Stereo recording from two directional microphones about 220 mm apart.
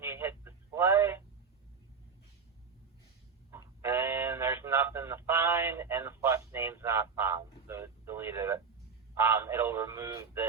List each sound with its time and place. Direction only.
0.0 s telephone: 10° right (ahead or behind)
3.5 s music: 10° right (ahead or behind)
9.1 s a sound: 10° right (ahead or behind)